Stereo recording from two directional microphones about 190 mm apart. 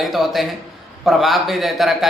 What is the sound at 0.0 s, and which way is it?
Speech, centre (ahead or behind).